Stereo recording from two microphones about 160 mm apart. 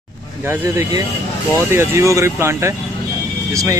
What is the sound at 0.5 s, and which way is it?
Speech, 15° right (ahead or behind).